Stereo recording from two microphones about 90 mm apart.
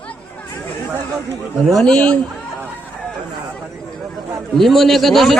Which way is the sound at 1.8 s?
10° left (ahead or behind).